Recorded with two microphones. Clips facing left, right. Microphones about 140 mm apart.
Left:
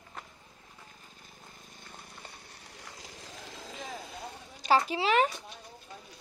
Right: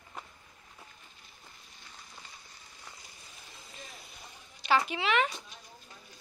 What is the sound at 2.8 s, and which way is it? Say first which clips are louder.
Vehicle: left 5 dB; 90° left.